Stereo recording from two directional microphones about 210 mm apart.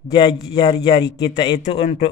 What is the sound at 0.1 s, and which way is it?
Speech, 20° left (ahead or behind).